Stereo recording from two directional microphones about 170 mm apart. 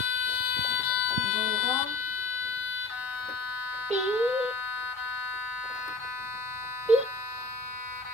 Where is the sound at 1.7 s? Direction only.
15° right (ahead or behind).